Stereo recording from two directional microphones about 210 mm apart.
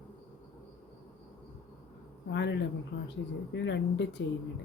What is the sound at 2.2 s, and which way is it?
Speech, 55° left (ahead or behind).